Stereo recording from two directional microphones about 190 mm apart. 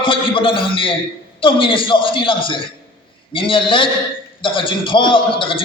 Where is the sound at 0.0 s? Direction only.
25° left (ahead or behind).